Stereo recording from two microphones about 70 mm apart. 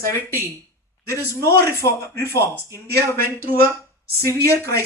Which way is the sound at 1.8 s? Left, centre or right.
Left.